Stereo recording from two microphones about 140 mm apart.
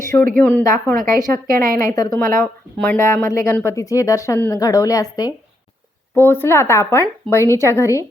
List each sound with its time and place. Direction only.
0.0 s a sound: 20° left (ahead or behind)
0.6 s speech: 20° left (ahead or behind)
1.2 s a woman's voice: 90° right
1.7 s speech: 20° left (ahead or behind)